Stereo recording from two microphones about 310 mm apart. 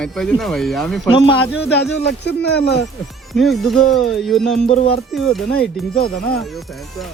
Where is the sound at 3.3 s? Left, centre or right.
Centre.